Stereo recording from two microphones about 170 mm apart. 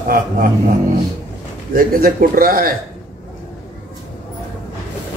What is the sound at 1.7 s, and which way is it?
A man's voice, 60° right (ahead or behind).